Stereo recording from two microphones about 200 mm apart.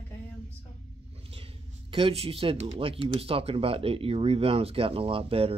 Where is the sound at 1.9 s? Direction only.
30° right (ahead or behind).